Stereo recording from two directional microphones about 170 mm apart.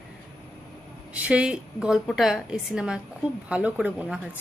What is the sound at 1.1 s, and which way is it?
Speech, 10° right (ahead or behind).